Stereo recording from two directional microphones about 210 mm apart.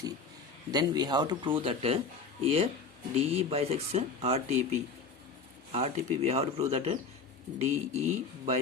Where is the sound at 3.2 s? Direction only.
30° right (ahead or behind).